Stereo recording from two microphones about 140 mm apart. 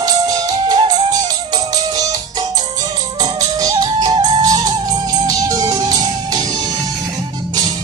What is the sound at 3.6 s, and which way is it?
Music, 25° right (ahead or behind).